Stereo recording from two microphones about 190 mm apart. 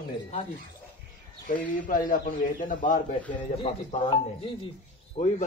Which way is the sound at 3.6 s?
30° left (ahead or behind).